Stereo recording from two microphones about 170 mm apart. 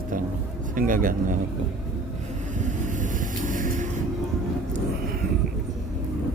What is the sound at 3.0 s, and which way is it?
Vehicle, 50° right (ahead or behind).